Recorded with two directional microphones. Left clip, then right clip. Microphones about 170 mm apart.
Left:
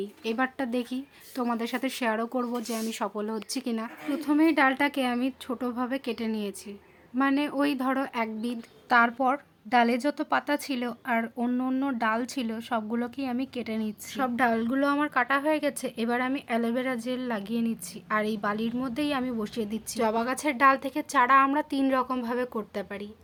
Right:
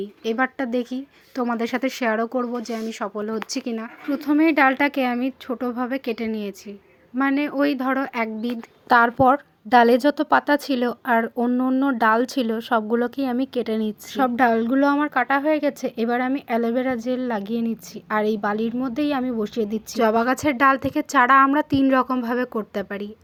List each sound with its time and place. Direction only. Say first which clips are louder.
0.0 s a woman's voice: right 6 dB; 20° right (ahead or behind)
8.9 s a woman's voice: right 7 dB; 40° right (ahead or behind)